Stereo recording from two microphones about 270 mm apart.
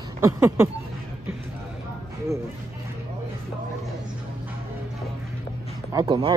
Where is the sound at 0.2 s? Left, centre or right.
Centre.